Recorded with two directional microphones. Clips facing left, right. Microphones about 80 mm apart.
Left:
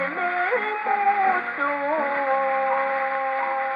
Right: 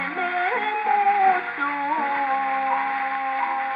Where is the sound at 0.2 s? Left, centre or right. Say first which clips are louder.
Right 1 dB; left.